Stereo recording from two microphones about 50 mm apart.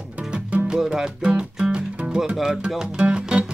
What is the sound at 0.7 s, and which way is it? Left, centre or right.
Music, centre.